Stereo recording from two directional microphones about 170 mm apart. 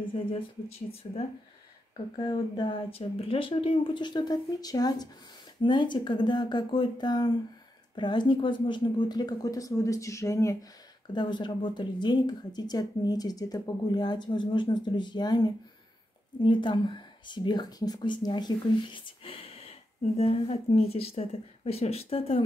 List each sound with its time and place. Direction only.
0.1 s speech: 35° left (ahead or behind)